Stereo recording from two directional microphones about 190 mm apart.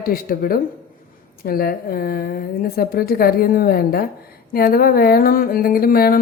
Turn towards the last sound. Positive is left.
turn(degrees=50)  # may be behind; listen again after turning